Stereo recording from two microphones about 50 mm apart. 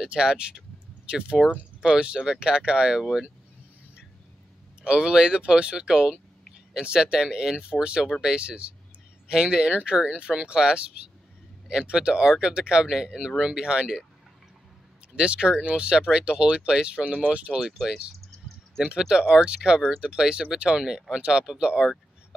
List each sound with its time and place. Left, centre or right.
0.0 s speech: centre
3.0 s speech: centre
4.8 s speech: centre
11.8 s speech: centre
15.1 s speech: right
17.6 s speech: centre